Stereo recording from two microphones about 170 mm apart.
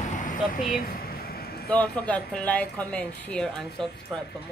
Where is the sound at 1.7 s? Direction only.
10° left (ahead or behind).